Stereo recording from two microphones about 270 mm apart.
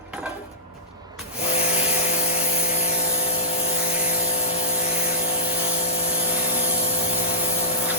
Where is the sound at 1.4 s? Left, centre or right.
Left.